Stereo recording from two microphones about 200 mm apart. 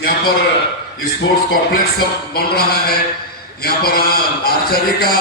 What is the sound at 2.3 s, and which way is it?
A man's voice, 50° left (ahead or behind).